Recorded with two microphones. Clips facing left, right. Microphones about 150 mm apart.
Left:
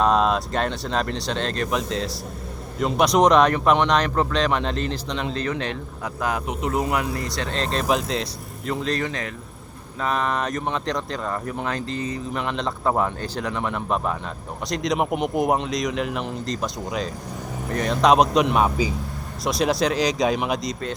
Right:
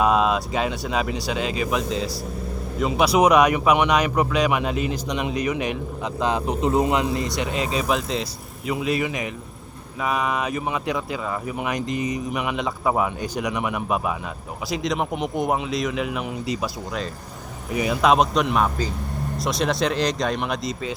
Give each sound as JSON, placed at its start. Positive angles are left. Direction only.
{"t": 0.0, "sound": "a man's voice", "side_deg": -5}
{"t": 7.4, "sound": "a man's voice", "side_deg": 0}
{"t": 13.2, "sound": "a man's voice", "side_deg": -15}